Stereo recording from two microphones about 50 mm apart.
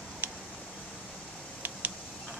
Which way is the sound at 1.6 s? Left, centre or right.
Right.